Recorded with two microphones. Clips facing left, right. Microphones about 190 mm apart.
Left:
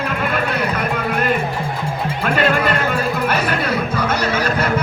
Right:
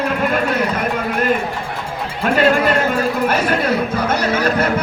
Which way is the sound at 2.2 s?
40° right (ahead or behind).